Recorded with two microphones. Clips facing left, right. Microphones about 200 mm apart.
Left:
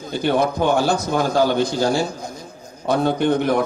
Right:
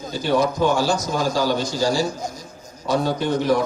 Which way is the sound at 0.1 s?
55° left (ahead or behind).